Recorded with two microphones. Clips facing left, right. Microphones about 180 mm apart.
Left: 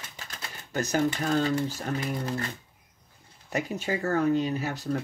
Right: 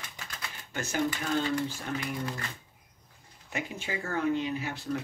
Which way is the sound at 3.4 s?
40° left (ahead or behind).